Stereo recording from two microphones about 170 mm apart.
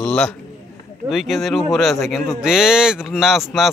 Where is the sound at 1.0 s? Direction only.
Centre (ahead or behind).